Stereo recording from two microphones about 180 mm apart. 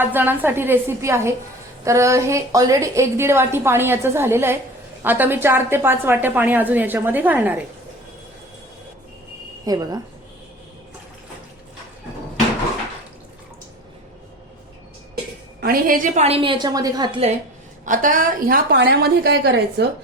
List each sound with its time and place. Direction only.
0.0 s a woman's voice: 10° right (ahead or behind)
9.6 s speech: 20° right (ahead or behind)
15.6 s a woman's voice: 50° right (ahead or behind); by 17.3 s 30° right (ahead or behind)
17.8 s a woman's voice: 45° right (ahead or behind); by 19.9 s 65° right (ahead or behind)